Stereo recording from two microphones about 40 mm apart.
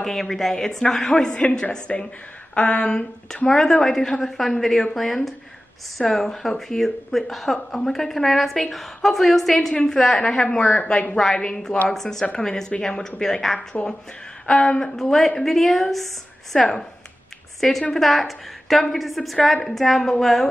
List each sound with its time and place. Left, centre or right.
0.0 s a woman's voice: centre
2.5 s speech: left
3.4 s a woman's voice: centre
10.1 s speech: left
11.9 s a woman's voice: centre
14.4 s speech: left
15.0 s a woman's voice: centre